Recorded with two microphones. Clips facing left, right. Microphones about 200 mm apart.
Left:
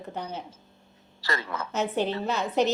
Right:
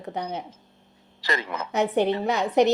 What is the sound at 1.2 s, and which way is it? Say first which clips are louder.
A woman's voice: right 3 dB; 15° right (ahead or behind).